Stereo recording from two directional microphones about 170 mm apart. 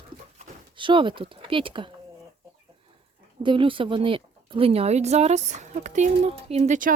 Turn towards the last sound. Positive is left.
turn(degrees=-50)  # may be behind; listen again after turning